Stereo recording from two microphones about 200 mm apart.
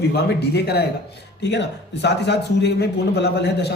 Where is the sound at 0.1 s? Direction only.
50° left (ahead or behind).